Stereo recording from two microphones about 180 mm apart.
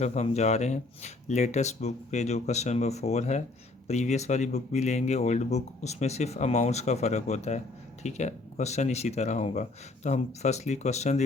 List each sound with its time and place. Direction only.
0.0 s speech: 40° left (ahead or behind)